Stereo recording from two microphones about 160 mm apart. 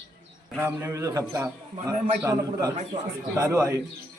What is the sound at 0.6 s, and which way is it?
A man's voice, 15° right (ahead or behind).